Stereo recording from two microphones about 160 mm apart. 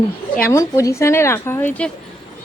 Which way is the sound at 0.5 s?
20° left (ahead or behind).